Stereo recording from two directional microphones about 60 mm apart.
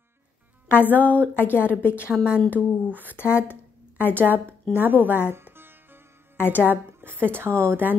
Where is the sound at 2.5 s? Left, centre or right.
Left.